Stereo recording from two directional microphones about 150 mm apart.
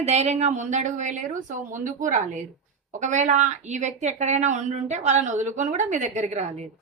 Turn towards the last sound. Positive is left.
turn(degrees=-50)  # may be behind; listen again after turning